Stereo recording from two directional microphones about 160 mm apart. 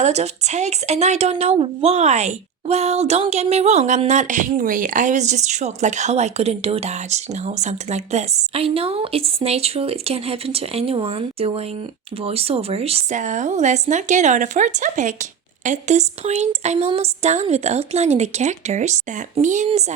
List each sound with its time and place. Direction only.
0.0 s a woman's voice: 45° right (ahead or behind)